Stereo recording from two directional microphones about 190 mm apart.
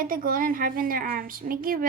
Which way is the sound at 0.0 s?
45° right (ahead or behind).